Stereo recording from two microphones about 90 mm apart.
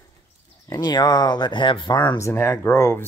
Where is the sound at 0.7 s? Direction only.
50° left (ahead or behind).